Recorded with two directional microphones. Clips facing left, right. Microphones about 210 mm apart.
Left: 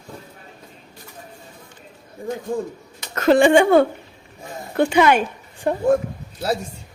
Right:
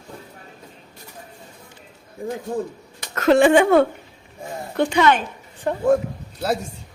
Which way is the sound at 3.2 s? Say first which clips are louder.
Left 1 dB; centre (ahead or behind).